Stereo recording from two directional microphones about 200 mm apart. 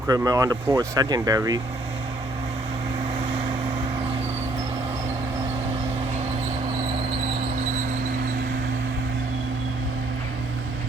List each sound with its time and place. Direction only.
0.1 s speech: 20° right (ahead or behind)